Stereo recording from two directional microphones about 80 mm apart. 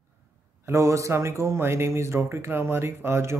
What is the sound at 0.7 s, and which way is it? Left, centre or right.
Speech, right.